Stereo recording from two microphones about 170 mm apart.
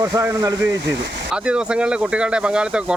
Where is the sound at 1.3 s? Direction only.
5° right (ahead or behind).